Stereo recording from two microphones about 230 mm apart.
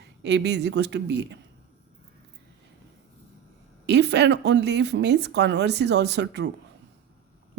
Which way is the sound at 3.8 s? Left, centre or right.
Right.